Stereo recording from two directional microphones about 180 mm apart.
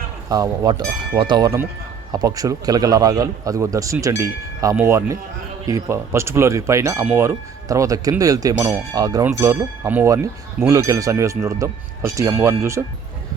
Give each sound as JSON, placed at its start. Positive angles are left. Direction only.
{"t": 0.3, "sound": "a man's voice", "side_deg": -20}